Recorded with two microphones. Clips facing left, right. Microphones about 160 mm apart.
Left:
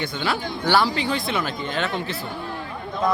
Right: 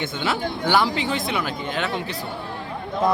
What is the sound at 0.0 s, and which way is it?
Speech, 20° right (ahead or behind).